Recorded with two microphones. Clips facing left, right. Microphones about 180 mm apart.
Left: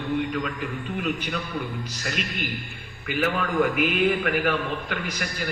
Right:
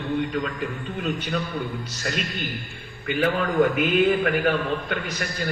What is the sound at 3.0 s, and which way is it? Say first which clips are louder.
A man's voice: right 3 dB; 35° right (ahead or behind).